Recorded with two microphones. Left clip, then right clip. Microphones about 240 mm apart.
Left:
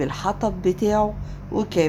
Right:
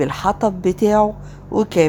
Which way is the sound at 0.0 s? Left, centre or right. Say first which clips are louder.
Right 6 dB; right.